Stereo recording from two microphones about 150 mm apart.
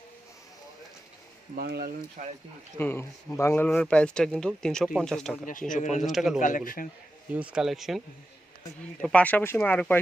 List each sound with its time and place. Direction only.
1.5 s speech: 85° right
2.7 s speech: 15° left (ahead or behind)
5.7 s speech: 55° left (ahead or behind)
6.0 s speech: centre (ahead or behind)